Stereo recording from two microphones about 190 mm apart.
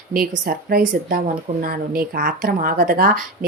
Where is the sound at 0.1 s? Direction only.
50° right (ahead or behind).